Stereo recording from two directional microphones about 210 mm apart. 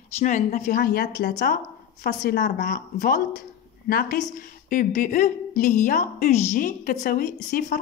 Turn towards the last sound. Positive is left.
turn(degrees=45)  # may be behind; listen again after turning